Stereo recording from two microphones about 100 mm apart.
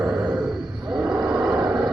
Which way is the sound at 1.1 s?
10° right (ahead or behind).